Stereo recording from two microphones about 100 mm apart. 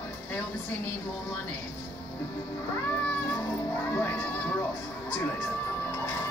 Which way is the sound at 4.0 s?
20° left (ahead or behind).